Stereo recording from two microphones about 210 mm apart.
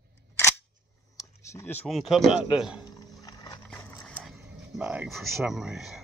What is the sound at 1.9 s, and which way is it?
Speech, centre (ahead or behind).